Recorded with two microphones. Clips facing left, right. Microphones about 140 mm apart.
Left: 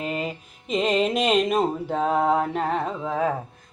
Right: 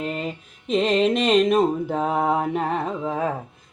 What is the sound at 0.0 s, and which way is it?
Mantra, 5° left (ahead or behind).